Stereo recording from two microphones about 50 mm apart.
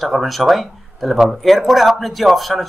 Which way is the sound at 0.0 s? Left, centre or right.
Centre.